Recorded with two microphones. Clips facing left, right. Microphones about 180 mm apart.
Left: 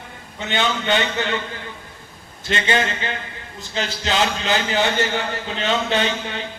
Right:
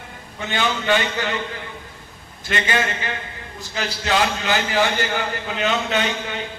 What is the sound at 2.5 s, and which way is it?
A man's voice, 25° left (ahead or behind).